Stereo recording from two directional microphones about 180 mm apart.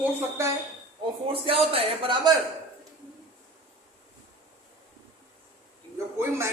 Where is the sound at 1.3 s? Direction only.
30° right (ahead or behind).